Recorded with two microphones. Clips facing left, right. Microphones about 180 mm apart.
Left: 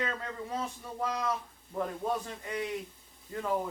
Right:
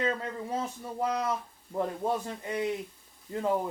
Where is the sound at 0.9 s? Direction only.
30° right (ahead or behind).